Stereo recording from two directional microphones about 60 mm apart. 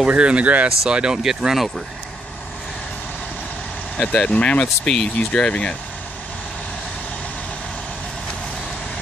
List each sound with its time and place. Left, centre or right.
0.1 s speech: centre
4.0 s speech: centre